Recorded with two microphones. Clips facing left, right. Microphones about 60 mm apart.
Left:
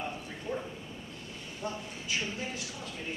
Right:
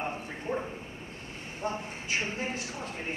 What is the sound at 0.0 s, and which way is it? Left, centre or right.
Bow-wow, right.